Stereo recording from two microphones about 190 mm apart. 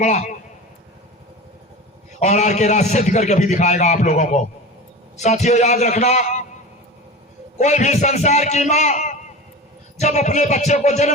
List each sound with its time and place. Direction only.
0.0 s a man's voice: 40° left (ahead or behind)
2.1 s a man's voice: 40° left (ahead or behind)
7.6 s a man's voice: 35° left (ahead or behind)